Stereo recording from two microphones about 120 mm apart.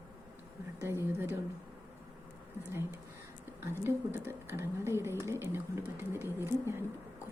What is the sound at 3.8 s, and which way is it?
Speech, 20° right (ahead or behind).